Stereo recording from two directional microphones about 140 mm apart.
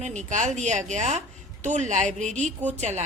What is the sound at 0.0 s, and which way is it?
A woman's voice, 55° right (ahead or behind).